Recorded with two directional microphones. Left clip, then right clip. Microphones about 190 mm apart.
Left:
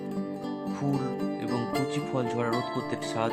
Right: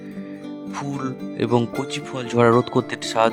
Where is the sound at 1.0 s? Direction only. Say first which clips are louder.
Right 5 dB; 55° right (ahead or behind).